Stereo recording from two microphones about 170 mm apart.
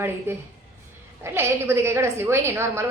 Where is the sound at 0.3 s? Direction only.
15° right (ahead or behind).